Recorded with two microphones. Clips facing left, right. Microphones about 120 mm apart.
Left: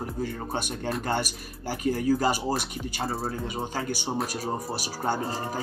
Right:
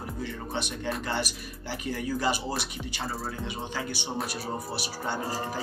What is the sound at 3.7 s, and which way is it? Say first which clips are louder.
Speech: left 3 dB; 45° left (ahead or behind).